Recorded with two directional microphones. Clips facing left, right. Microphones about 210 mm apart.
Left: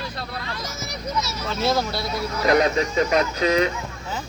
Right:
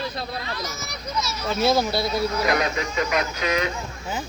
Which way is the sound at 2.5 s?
30° left (ahead or behind).